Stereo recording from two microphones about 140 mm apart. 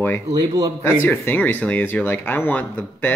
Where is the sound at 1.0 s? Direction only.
15° left (ahead or behind).